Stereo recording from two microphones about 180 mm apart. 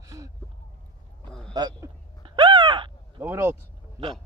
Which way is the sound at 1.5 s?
25° right (ahead or behind).